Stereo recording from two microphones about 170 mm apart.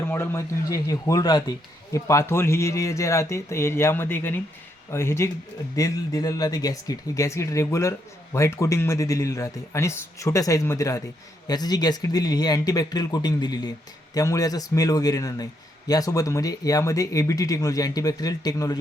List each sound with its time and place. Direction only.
0.0 s speech: 15° left (ahead or behind)